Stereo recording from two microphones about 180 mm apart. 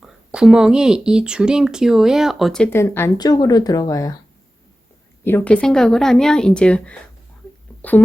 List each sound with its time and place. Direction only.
0.0 s speech: 5° right (ahead or behind)
2.6 s speech: 15° left (ahead or behind)
5.2 s speech: 10° left (ahead or behind)